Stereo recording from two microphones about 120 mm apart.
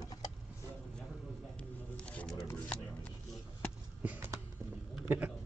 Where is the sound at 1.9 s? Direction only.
10° left (ahead or behind).